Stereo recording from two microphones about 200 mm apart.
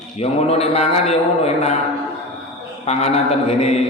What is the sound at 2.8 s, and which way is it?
A man's voice, 30° left (ahead or behind).